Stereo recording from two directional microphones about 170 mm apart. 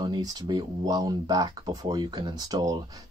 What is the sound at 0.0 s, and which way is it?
Speech, 25° right (ahead or behind).